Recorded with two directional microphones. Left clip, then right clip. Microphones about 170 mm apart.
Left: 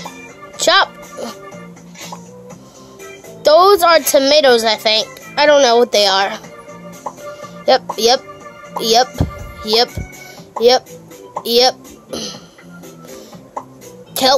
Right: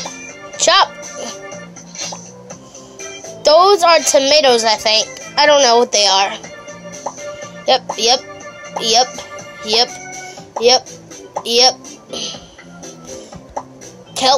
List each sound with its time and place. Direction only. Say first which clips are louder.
0.6 s a child's voice: right 1 dB; 25° left (ahead or behind)
3.4 s a child's voice: even; 30° left (ahead or behind)
7.6 s a child's voice: left 1 dB; 35° left (ahead or behind)
11.4 s speech: even; 35° left (ahead or behind)
12.1 s music: right 1 dB; 45° left (ahead or behind)
14.2 s music: left 1 dB; 35° left (ahead or behind)